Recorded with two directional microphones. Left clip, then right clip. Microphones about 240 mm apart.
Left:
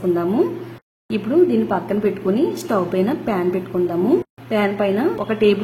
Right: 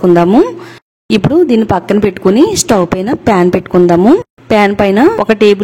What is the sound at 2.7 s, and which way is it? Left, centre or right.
Speech, right.